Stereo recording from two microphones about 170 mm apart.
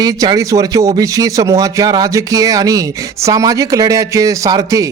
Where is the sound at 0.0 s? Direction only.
20° right (ahead or behind).